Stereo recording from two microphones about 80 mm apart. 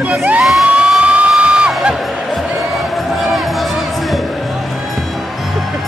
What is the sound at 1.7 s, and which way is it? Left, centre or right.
Music, centre.